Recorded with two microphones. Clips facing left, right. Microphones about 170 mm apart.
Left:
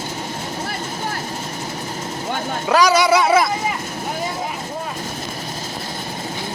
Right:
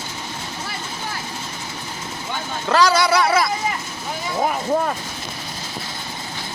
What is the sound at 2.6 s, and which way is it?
Speech, 15° left (ahead or behind).